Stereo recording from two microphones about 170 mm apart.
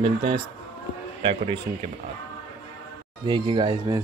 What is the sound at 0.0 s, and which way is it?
Speech, 30° right (ahead or behind).